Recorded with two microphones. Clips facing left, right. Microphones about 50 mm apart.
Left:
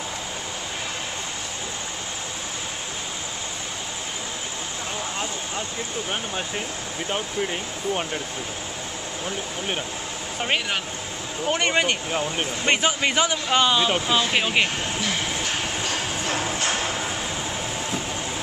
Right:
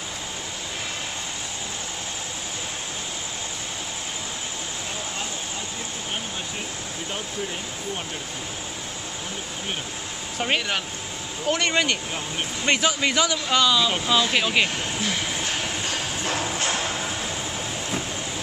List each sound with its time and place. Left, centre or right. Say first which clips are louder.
10.4 s speech: even; centre
11.5 s speech: left 1 dB; left
14.0 s speech: even; centre